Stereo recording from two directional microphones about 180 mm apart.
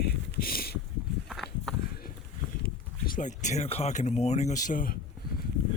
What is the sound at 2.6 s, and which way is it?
Speech, 50° left (ahead or behind).